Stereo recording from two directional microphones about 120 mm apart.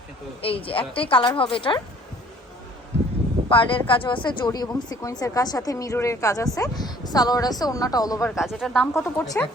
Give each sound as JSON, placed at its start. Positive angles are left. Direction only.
{"t": 0.4, "sound": "a woman's voice", "side_deg": 50}
{"t": 3.5, "sound": "a woman's voice", "side_deg": 45}
{"t": 8.4, "sound": "speech", "side_deg": 0}
{"t": 8.9, "sound": "speech", "side_deg": 20}